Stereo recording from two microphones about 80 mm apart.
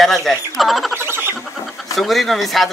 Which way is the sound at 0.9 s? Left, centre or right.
Right.